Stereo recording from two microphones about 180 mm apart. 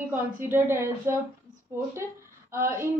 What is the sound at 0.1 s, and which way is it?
A woman's voice, 10° right (ahead or behind).